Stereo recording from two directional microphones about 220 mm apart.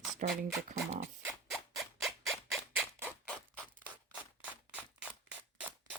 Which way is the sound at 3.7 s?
5° right (ahead or behind).